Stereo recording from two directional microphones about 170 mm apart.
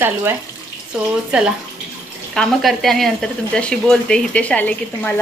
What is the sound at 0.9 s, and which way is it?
A woman's voice, 5° right (ahead or behind).